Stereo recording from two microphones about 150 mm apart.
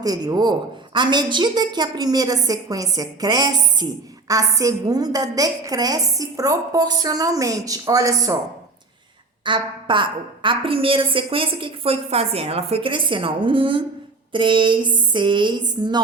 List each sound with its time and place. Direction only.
0.0 s a woman's voice: 25° right (ahead or behind)
9.4 s a woman's voice: 35° right (ahead or behind)